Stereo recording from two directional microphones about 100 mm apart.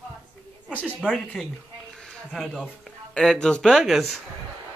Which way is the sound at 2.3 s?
5° left (ahead or behind).